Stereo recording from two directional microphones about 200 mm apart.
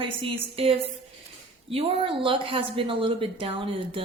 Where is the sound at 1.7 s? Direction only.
25° right (ahead or behind).